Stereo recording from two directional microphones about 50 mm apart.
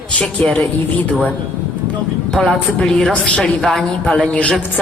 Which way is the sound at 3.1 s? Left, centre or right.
Left.